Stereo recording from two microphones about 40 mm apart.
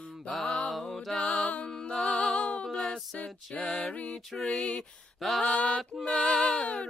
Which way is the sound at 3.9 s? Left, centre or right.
Left.